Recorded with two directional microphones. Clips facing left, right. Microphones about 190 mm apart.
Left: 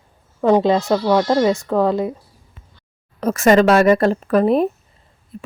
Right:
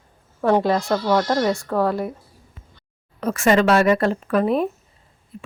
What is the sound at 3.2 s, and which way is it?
A woman's voice, 40° left (ahead or behind).